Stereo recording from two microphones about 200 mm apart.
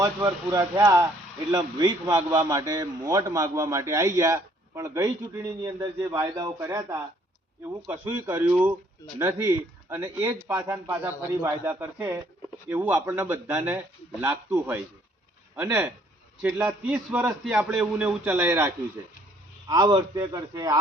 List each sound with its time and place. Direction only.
0.0 s a man's voice: 15° right (ahead or behind)